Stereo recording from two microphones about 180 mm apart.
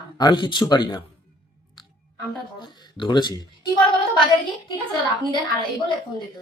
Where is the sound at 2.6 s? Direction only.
25° left (ahead or behind).